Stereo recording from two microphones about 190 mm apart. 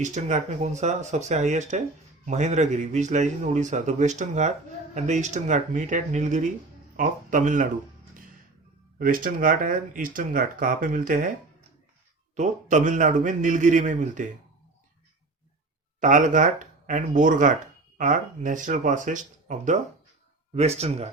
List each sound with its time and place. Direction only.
0.0 s a man's voice: 40° right (ahead or behind)
9.0 s speech: 45° right (ahead or behind)
12.4 s a man's voice: 40° right (ahead or behind)
16.0 s a man's voice: 40° right (ahead or behind)